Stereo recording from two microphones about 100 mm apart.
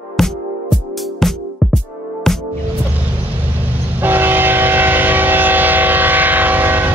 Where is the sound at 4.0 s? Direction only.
20° right (ahead or behind).